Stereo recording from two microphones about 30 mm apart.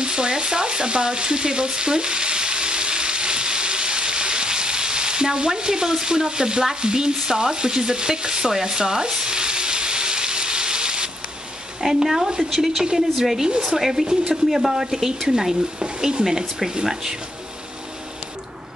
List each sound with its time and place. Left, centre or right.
0.0 s frying: right
11.9 s speech: centre